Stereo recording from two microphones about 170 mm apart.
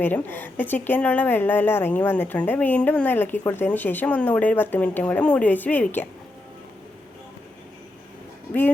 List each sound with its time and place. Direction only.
0.0 s speech: 10° left (ahead or behind)